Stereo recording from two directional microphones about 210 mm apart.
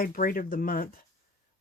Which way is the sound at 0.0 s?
40° left (ahead or behind).